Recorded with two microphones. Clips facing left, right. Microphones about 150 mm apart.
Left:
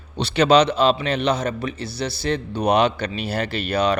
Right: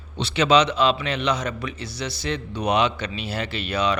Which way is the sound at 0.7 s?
35° left (ahead or behind).